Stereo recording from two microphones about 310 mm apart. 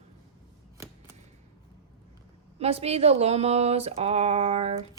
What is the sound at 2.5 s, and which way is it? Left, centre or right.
Speech, centre.